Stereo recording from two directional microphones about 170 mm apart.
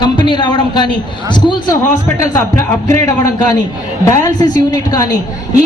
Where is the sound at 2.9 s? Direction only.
20° left (ahead or behind).